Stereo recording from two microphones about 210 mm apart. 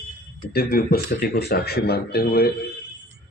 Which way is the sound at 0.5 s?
45° left (ahead or behind).